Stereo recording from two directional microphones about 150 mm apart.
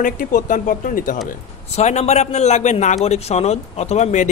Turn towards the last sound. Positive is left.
turn(degrees=50)  # may be behind; listen again after turning